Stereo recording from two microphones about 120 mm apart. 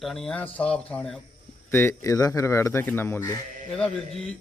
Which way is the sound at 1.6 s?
20° left (ahead or behind).